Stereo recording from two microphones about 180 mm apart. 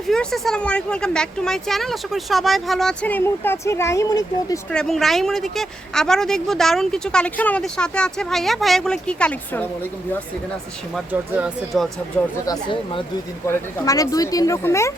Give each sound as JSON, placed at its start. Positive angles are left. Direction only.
{"t": 0.1, "sound": "a woman's voice", "side_deg": 0}
{"t": 4.7, "sound": "a woman's voice", "side_deg": 0}
{"t": 10.9, "sound": "a woman's voice", "side_deg": -10}
{"t": 12.5, "sound": "speech", "side_deg": 25}